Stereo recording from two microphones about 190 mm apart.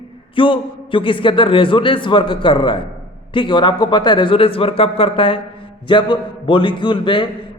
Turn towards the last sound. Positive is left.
turn(degrees=25)  # may be behind; listen again after turning